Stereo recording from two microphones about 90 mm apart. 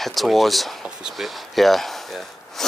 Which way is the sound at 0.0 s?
Centre (ahead or behind).